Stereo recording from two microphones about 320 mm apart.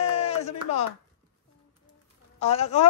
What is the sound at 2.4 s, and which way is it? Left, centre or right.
Speech, centre.